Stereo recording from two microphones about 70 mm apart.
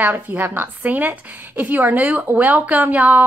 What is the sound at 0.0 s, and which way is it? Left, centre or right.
A woman's voice, right.